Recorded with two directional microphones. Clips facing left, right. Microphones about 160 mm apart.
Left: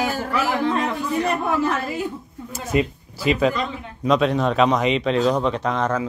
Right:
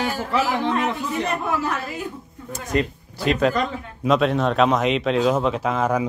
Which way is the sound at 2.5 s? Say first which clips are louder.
Left 1 dB; 5° left (ahead or behind).